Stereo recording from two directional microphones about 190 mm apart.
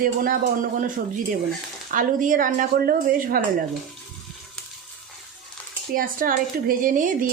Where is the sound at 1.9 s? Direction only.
45° right (ahead or behind).